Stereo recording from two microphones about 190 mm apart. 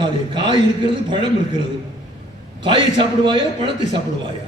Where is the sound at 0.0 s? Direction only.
25° right (ahead or behind).